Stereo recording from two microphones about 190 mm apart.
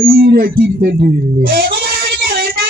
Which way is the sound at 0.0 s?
55° right (ahead or behind).